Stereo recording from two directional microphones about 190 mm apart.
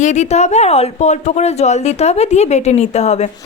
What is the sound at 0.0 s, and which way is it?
A woman's voice, 40° left (ahead or behind).